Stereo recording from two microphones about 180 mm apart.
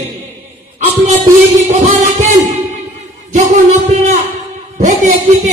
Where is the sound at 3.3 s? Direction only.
45° right (ahead or behind).